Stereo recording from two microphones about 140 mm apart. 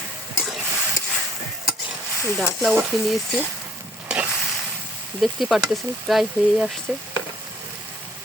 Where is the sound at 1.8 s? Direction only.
20° right (ahead or behind).